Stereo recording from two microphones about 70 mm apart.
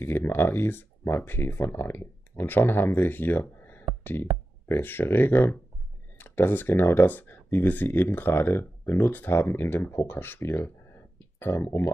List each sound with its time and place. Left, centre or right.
0.0 s speech: left